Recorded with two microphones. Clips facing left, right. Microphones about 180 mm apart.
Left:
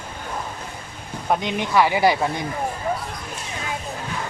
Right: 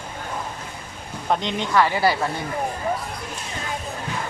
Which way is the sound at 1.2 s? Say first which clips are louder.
Left 1 dB; 10° left (ahead or behind).